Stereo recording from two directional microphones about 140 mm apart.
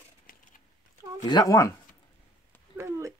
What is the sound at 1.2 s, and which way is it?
Speech, 30° left (ahead or behind).